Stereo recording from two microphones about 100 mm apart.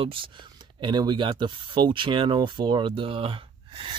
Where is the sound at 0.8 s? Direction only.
50° right (ahead or behind).